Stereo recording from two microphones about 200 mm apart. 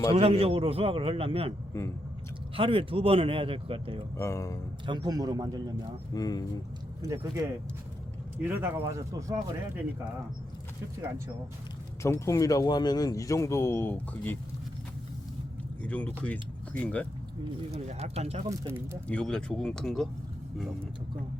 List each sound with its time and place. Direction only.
0.1 s a man's voice: 30° right (ahead or behind)
2.6 s a man's voice: 25° right (ahead or behind)
4.2 s speech: 15° left (ahead or behind)
4.9 s a man's voice: 20° right (ahead or behind)
6.1 s speech: 20° left (ahead or behind)
8.4 s speech: 10° right (ahead or behind)
12.0 s speech: 15° left (ahead or behind)
15.8 s speech: 5° left (ahead or behind)
17.7 s speech: 30° right (ahead or behind)
18.4 s speech: 15° right (ahead or behind)
19.0 s speech: 5° left (ahead or behind)